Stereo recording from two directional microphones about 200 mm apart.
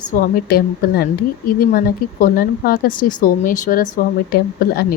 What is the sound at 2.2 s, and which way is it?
A woman's voice, 45° left (ahead or behind).